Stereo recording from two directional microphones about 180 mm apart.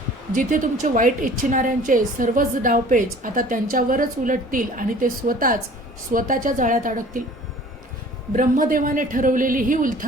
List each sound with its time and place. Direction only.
0.3 s a woman's voice: 50° right (ahead or behind)
8.3 s a woman's voice: 45° right (ahead or behind)